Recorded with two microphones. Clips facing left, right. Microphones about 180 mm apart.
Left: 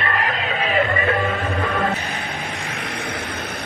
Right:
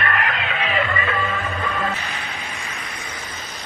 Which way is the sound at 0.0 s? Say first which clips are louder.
Left 1 dB; 30° left (ahead or behind).